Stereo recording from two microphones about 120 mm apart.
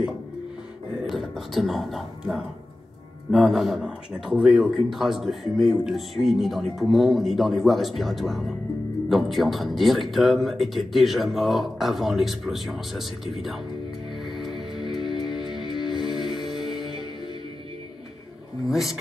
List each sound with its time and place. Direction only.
1.0 s speech: centre (ahead or behind)
14.3 s music: centre (ahead or behind)
15.1 s music: 35° left (ahead or behind)
15.4 s music: centre (ahead or behind)
16.6 s music: 45° right (ahead or behind)
18.7 s speech: centre (ahead or behind)